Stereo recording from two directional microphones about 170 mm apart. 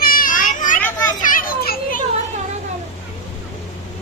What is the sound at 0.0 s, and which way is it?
Children playing, 55° left (ahead or behind).